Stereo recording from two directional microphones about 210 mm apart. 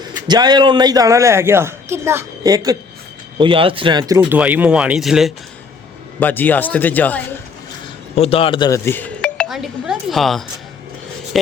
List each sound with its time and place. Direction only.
0.3 s a woman's voice: 20° right (ahead or behind)
4.2 s speech: 5° right (ahead or behind)
6.1 s speech: 10° left (ahead or behind)
8.1 s speech: 30° left (ahead or behind); by 10.4 s centre (ahead or behind)